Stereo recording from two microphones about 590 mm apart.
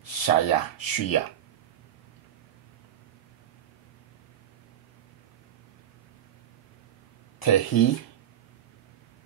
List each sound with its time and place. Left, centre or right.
0.0 s speech: left
7.3 s speech: left